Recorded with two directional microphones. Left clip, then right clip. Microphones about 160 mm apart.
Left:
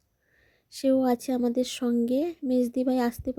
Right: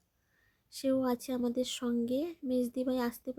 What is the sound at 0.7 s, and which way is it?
Speech, 30° left (ahead or behind).